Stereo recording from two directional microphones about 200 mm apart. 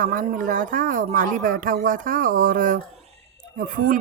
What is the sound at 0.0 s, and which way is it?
Speech, 40° right (ahead or behind).